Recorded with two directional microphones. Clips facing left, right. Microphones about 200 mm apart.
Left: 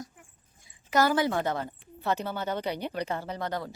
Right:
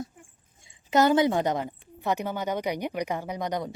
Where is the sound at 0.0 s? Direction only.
25° right (ahead or behind).